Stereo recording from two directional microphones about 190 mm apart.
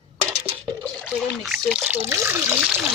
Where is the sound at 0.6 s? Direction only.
Centre (ahead or behind).